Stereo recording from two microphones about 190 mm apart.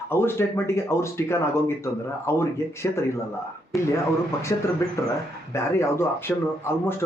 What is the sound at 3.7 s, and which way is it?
Speech, centre (ahead or behind).